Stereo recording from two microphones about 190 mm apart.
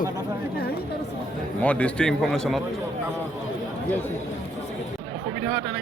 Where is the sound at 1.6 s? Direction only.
5° left (ahead or behind).